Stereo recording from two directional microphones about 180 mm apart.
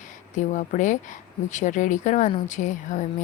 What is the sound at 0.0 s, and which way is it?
Speech, 45° left (ahead or behind).